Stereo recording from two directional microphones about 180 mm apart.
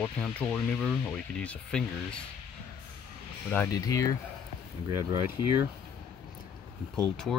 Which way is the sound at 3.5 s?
15° left (ahead or behind).